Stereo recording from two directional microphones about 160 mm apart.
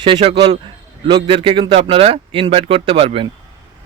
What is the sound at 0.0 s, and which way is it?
Speech, 35° right (ahead or behind).